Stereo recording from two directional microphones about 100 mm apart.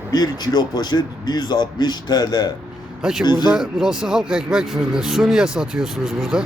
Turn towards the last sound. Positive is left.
turn(degrees=-5)  # may be behind; listen again after turning